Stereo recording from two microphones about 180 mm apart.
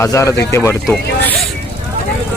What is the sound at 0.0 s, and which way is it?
Speech, 15° left (ahead or behind).